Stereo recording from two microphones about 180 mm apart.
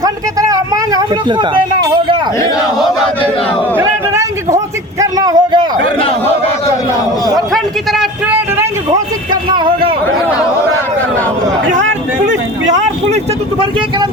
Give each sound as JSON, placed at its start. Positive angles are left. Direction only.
{"t": 0.0, "sound": "speech", "side_deg": -20}
{"t": 3.8, "sound": "a man's voice", "side_deg": -15}
{"t": 7.3, "sound": "a man's voice", "side_deg": 0}
{"t": 9.3, "sound": "speech", "side_deg": -25}
{"t": 11.8, "sound": "speech", "side_deg": -90}
{"t": 13.6, "sound": "speech", "side_deg": -30}